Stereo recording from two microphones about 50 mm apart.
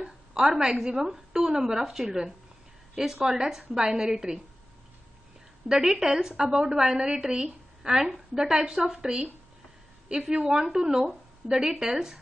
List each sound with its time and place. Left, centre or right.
0.0 s a woman's voice: centre
5.7 s a woman's voice: centre